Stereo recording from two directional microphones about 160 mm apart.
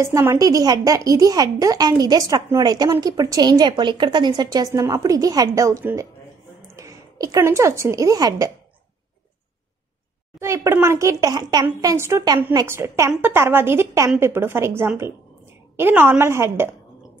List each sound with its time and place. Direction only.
0.0 s a woman's voice: 15° right (ahead or behind)
10.4 s a woman's voice: 20° right (ahead or behind)